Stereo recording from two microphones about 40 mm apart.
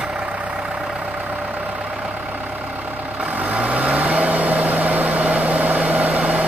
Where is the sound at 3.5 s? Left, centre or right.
Right.